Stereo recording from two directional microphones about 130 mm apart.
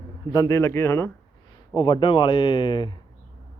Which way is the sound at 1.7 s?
35° left (ahead or behind).